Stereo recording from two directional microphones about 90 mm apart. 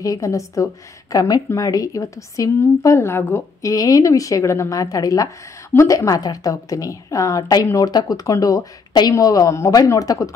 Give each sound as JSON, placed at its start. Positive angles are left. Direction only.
{"t": 0.0, "sound": "a woman's voice", "side_deg": 40}
{"t": 3.7, "sound": "a woman's voice", "side_deg": 40}